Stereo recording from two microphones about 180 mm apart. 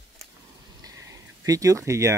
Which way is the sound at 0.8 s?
20° right (ahead or behind).